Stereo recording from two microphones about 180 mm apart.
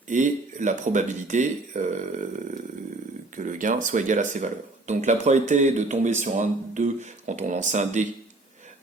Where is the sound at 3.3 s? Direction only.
45° right (ahead or behind).